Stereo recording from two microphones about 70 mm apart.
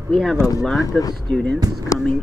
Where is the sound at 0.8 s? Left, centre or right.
Left.